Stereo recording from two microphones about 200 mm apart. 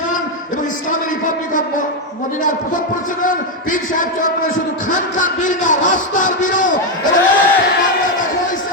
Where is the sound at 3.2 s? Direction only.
40° left (ahead or behind).